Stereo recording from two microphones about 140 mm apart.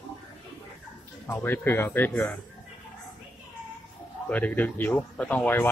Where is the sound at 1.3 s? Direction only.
15° left (ahead or behind).